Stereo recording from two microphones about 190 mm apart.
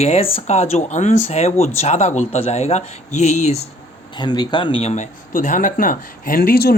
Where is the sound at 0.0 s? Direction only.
30° left (ahead or behind).